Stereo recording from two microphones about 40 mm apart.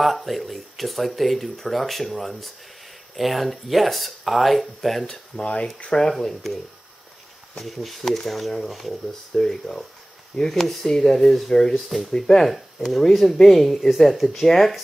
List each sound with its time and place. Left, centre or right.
0.0 s speech: centre
5.3 s speech: left
6.0 s speech: centre
7.6 s speech: centre
9.3 s speech: centre
10.6 s speech: centre
10.9 s speech: centre
12.2 s speech: centre
12.4 s speech: centre